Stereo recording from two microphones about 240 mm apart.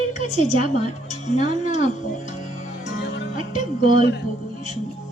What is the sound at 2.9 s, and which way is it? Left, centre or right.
Music, left.